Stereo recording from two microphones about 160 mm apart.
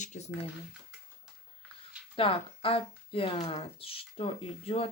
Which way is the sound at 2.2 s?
35° left (ahead or behind).